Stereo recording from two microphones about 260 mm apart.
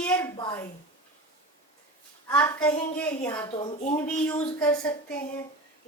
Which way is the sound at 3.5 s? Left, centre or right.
Centre.